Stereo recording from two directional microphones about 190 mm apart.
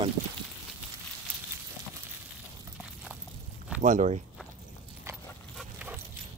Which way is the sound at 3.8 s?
35° right (ahead or behind).